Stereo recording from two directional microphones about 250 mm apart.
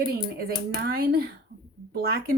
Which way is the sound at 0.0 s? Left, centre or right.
Right.